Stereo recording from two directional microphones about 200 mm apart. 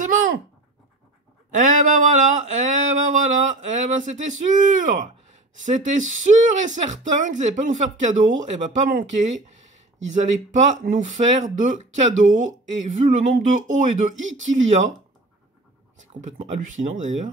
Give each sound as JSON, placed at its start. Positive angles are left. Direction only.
{"t": 1.5, "sound": "a sound", "side_deg": -40}
{"t": 3.9, "sound": "speech", "side_deg": -40}
{"t": 14.1, "sound": "speech", "side_deg": -75}
{"t": 14.5, "sound": "speech", "side_deg": -35}
{"t": 16.1, "sound": "speech", "side_deg": -35}